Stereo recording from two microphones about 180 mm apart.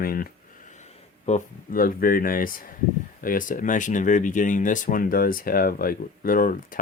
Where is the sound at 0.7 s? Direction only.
40° left (ahead or behind).